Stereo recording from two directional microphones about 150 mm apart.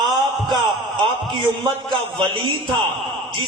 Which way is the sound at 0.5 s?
30° right (ahead or behind).